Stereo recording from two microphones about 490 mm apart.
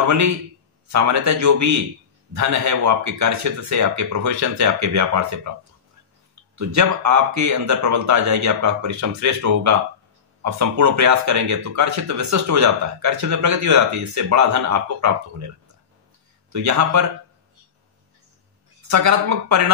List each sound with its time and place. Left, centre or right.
0.0 s speech: right
6.5 s speech: right
16.5 s speech: right
18.8 s speech: right